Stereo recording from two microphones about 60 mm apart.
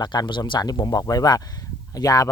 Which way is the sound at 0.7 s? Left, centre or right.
Left.